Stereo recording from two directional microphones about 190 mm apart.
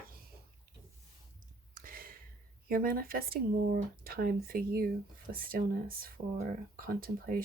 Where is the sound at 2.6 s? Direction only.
50° right (ahead or behind).